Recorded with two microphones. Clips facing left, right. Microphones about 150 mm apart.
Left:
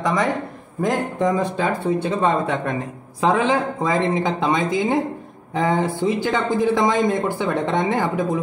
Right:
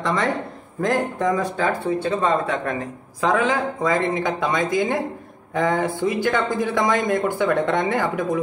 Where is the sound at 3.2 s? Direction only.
25° left (ahead or behind).